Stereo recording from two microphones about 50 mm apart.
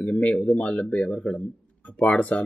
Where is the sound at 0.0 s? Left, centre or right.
Left.